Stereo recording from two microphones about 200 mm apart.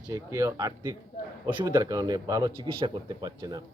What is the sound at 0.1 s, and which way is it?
Speech, 15° right (ahead or behind).